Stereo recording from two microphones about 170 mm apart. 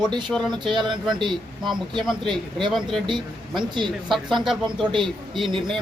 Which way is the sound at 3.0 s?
30° right (ahead or behind).